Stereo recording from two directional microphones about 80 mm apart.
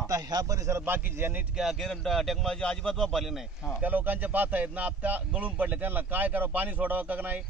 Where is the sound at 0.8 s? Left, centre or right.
Right.